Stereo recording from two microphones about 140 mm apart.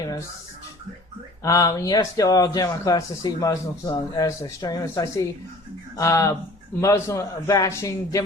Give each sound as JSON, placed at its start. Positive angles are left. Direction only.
{"t": 1.5, "sound": "speech", "side_deg": 25}